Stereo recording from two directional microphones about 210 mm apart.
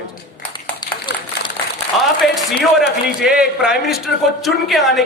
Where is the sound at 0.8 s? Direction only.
20° left (ahead or behind).